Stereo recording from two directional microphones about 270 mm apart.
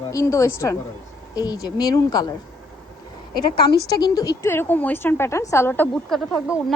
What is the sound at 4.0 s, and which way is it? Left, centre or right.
A woman's voice, centre.